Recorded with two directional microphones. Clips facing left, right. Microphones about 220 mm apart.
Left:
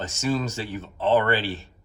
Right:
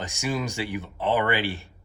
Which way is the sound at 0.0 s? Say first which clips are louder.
Left 3 dB; 15° right (ahead or behind).